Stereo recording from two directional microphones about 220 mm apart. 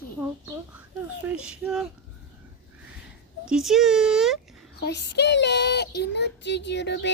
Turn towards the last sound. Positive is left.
turn(degrees=50)  # may be behind; listen again after turning